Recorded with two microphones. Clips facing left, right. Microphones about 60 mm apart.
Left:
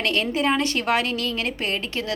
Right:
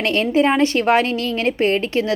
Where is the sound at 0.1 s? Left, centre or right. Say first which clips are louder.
Right 7 dB; right.